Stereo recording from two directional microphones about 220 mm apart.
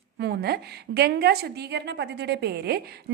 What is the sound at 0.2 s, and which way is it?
A woman's voice, 45° right (ahead or behind).